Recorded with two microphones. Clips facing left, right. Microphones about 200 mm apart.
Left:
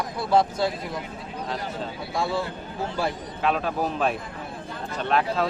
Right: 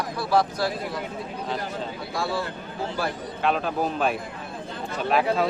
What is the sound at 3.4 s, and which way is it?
A man's voice, centre (ahead or behind).